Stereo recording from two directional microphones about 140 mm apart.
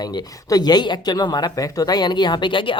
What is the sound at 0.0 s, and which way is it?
Speech, 30° left (ahead or behind).